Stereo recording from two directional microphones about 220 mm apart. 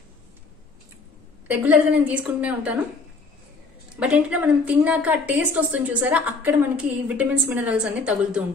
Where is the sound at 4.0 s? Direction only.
5° right (ahead or behind).